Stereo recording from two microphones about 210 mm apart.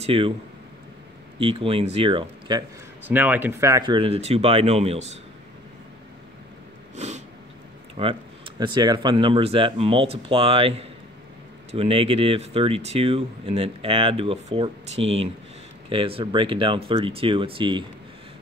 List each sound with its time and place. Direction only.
0.0 s speech: 25° right (ahead or behind)
1.4 s speech: 25° right (ahead or behind)
3.0 s speech: 10° right (ahead or behind); by 5.0 s 30° right (ahead or behind)
7.0 s a sound: 30° right (ahead or behind)
8.0 s speech: 25° right (ahead or behind)